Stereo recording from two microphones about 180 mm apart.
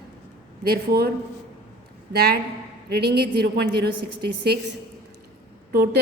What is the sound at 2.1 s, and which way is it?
A woman's voice, 60° right (ahead or behind).